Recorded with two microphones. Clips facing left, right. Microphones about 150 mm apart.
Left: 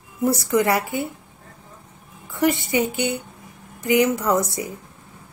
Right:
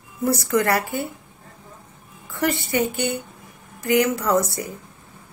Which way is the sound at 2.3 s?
20° left (ahead or behind).